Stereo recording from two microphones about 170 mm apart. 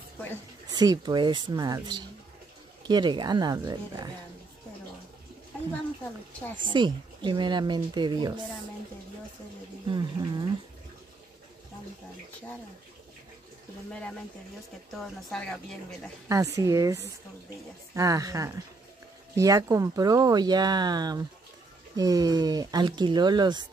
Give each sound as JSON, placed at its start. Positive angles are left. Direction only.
{"t": 0.7, "sound": "speech", "side_deg": -25}
{"t": 6.6, "sound": "speech", "side_deg": -25}
{"t": 9.8, "sound": "speech", "side_deg": -25}
{"t": 15.0, "sound": "speech", "side_deg": 5}
{"t": 16.5, "sound": "speech", "side_deg": -20}